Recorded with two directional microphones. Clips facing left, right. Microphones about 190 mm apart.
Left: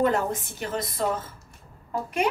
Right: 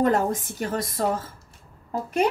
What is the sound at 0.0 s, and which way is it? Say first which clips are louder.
A woman's voice: right 2 dB; 45° right (ahead or behind).